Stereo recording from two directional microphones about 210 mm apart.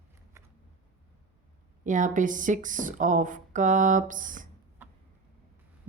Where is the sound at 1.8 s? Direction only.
40° right (ahead or behind).